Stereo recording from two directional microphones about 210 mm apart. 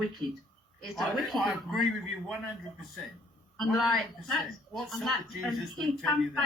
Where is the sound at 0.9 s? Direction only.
Centre (ahead or behind).